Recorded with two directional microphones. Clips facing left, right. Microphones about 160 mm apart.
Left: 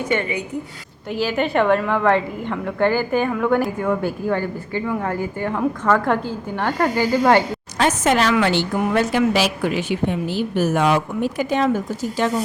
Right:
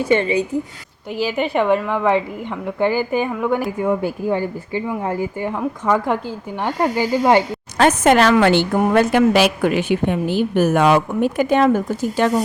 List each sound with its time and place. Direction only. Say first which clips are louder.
0.1 s a woman's voice: right 7 dB; 25° right (ahead or behind)
1.1 s a woman's voice: even; 10° right (ahead or behind)
7.8 s a woman's voice: right 5 dB; 55° right (ahead or behind)